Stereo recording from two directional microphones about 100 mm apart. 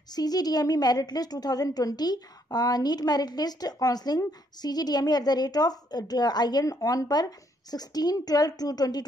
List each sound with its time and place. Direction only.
0.1 s a woman's voice: 40° left (ahead or behind)